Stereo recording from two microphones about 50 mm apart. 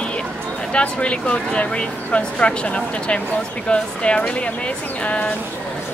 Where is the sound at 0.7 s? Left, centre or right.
Left.